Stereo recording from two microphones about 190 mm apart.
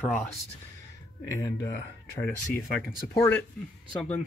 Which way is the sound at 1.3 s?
15° left (ahead or behind).